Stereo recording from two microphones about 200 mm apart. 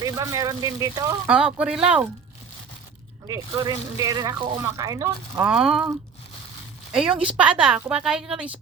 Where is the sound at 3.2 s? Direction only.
20° right (ahead or behind); by 5.9 s 5° right (ahead or behind).